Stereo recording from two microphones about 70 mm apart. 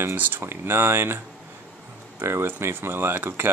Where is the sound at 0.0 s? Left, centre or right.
Right.